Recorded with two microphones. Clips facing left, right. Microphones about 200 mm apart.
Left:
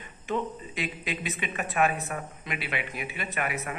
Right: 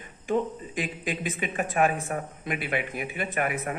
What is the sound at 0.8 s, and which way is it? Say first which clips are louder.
Speech: right 3 dB; 50° right (ahead or behind).